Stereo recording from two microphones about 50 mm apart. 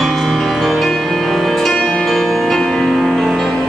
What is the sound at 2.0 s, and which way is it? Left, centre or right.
Music, centre.